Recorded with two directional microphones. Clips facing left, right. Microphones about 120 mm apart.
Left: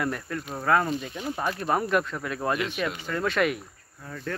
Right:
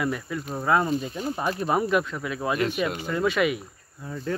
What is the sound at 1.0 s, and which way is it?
Speech, 35° right (ahead or behind).